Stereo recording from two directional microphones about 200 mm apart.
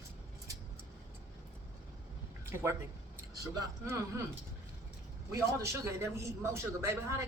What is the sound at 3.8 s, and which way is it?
Speech, 15° right (ahead or behind).